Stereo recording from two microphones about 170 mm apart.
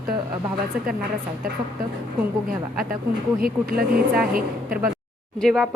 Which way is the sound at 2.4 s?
55° right (ahead or behind).